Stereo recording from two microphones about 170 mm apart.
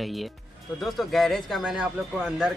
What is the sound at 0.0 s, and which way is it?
Speech, centre (ahead or behind).